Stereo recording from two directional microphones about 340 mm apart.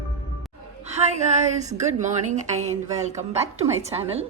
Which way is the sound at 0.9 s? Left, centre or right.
Centre.